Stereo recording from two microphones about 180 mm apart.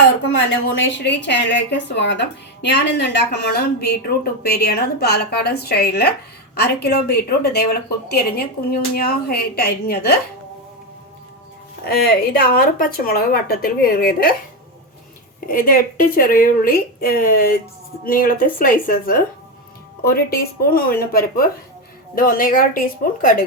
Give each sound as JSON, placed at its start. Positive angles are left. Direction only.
{"t": 0.3, "sound": "a woman's voice", "side_deg": 75}
{"t": 11.9, "sound": "a woman's voice", "side_deg": 60}
{"t": 15.4, "sound": "a woman's voice", "side_deg": 55}